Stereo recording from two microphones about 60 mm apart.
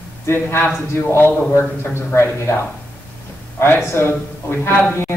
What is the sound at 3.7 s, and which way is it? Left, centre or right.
A man's voice, left.